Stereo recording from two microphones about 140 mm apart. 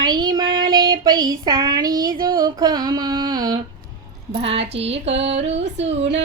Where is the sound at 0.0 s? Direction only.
30° right (ahead or behind).